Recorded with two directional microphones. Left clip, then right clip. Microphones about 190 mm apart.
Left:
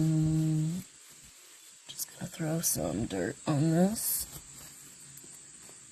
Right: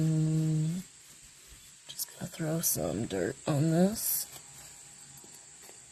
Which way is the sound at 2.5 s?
15° right (ahead or behind).